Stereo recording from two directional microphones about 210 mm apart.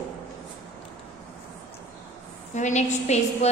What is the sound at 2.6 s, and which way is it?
Speech, 35° left (ahead or behind).